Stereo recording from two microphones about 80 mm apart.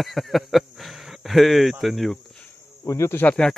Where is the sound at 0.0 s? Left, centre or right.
Centre.